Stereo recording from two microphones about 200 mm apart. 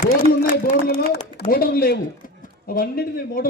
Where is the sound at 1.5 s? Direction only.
50° left (ahead or behind).